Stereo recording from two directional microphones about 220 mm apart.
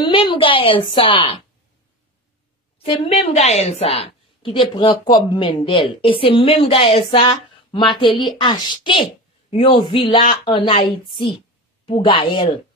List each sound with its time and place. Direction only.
0.0 s a woman's voice: 20° left (ahead or behind)
2.8 s a woman's voice: 25° left (ahead or behind)